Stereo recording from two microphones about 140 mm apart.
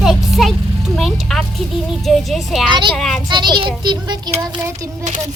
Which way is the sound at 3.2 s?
30° right (ahead or behind).